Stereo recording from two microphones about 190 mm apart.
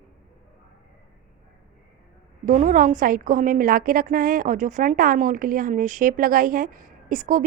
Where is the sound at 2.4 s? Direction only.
45° right (ahead or behind).